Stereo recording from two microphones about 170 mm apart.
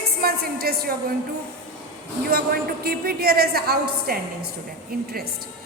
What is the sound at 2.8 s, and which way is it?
A woman's voice, 65° right (ahead or behind).